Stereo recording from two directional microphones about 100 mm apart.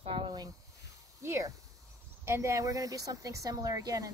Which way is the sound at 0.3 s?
40° right (ahead or behind).